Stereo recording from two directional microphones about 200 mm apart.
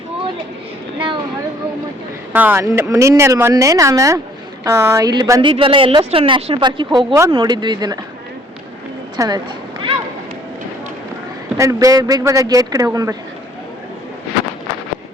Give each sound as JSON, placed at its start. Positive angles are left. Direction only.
{"t": 0.9, "sound": "speech", "side_deg": -25}
{"t": 2.3, "sound": "a woman's voice", "side_deg": -10}
{"t": 9.1, "sound": "speech", "side_deg": -20}
{"t": 11.5, "sound": "speech", "side_deg": -15}